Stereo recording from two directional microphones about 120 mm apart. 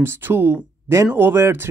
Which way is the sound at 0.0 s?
20° right (ahead or behind).